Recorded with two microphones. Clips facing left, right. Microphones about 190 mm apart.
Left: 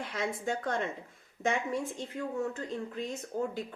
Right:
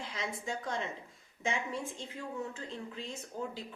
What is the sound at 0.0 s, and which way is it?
Speech, 55° left (ahead or behind).